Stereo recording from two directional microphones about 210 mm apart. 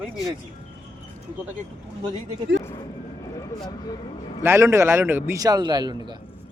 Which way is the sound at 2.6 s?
20° left (ahead or behind).